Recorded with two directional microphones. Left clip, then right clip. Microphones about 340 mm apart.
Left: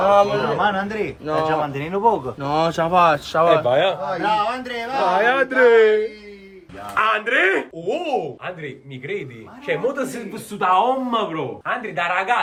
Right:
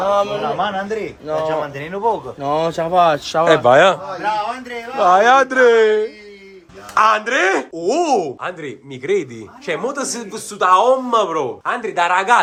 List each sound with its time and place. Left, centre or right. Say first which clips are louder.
0.0 s speech: left 1 dB; centre
4.4 s speech: left 1 dB; centre
7.5 s speech: right 5 dB; centre